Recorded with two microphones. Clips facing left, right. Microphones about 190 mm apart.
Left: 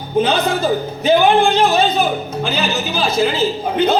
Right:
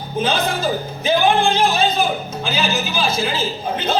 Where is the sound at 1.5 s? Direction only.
60° left (ahead or behind).